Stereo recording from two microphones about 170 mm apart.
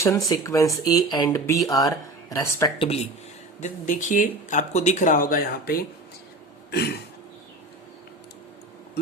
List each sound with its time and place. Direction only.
0.3 s speech: 20° left (ahead or behind)
2.7 s speech: 35° left (ahead or behind)
3.6 s speech: 50° left (ahead or behind)
6.7 s throat clearing: 75° left (ahead or behind)